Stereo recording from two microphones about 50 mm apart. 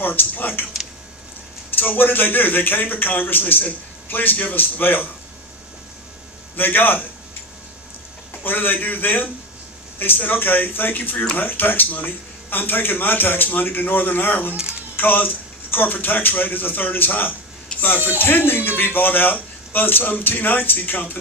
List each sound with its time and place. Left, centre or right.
0.0 s a man's voice: left
1.8 s a man's voice: left
6.6 s a man's voice: left
8.4 s a man's voice: left
14.5 s speech: centre
14.9 s a man's voice: left